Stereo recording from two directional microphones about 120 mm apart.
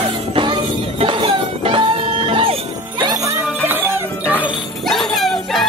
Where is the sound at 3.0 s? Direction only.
30° right (ahead or behind).